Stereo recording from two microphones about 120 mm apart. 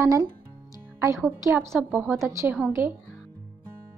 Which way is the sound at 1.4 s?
25° right (ahead or behind).